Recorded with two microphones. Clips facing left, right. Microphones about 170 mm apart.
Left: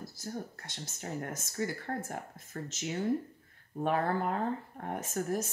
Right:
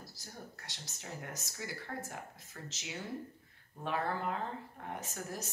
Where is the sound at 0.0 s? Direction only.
50° left (ahead or behind).